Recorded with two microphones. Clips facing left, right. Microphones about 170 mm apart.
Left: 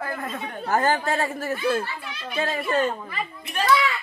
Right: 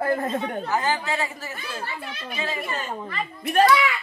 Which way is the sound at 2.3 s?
50° left (ahead or behind).